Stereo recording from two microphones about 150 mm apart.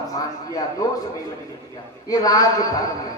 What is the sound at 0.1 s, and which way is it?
Speech, 25° left (ahead or behind).